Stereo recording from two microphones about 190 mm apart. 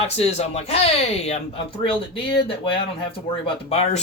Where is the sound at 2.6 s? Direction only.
30° left (ahead or behind).